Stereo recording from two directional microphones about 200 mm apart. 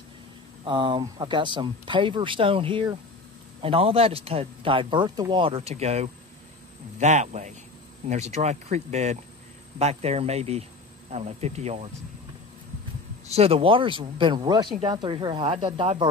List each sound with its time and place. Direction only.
0.7 s speech: 25° right (ahead or behind)
13.3 s speech: 30° right (ahead or behind)